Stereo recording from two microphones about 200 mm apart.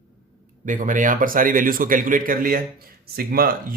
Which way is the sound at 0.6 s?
40° right (ahead or behind).